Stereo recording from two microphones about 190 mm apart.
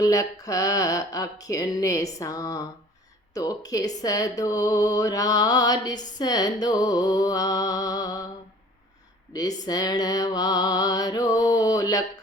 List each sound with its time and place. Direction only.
0.0 s a sound: 15° left (ahead or behind)
3.3 s speech: 20° left (ahead or behind)
9.3 s speech: 20° left (ahead or behind)